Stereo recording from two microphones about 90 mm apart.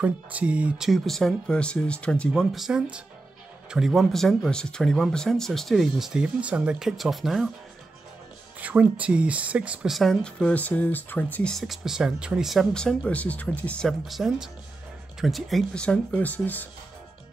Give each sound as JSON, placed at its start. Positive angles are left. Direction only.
{"t": 0.0, "sound": "speech", "side_deg": -15}
{"t": 2.5, "sound": "speech", "side_deg": -5}
{"t": 8.5, "sound": "speech", "side_deg": -15}
{"t": 9.8, "sound": "speech", "side_deg": 0}
{"t": 10.2, "sound": "speech", "side_deg": 15}
{"t": 11.5, "sound": "speech", "side_deg": 0}
{"t": 12.7, "sound": "speech", "side_deg": 10}
{"t": 13.8, "sound": "speech", "side_deg": 0}